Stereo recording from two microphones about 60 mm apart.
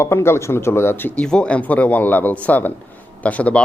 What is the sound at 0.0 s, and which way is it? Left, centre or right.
Speech, left.